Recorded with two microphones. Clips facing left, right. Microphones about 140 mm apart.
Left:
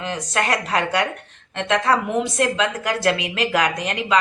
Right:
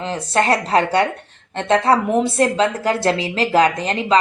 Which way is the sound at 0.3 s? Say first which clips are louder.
Right 6 dB; 30° right (ahead or behind).